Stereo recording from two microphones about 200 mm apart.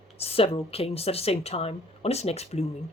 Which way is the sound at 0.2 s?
30° left (ahead or behind).